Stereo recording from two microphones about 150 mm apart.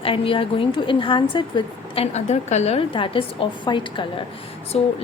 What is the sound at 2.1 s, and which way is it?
Speech, 50° left (ahead or behind).